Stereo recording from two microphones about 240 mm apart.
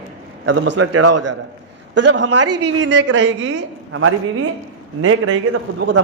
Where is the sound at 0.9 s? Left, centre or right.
Right.